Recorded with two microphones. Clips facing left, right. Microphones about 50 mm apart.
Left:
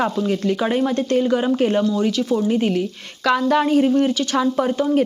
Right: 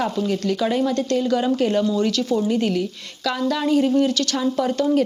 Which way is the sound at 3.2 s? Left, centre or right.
Left.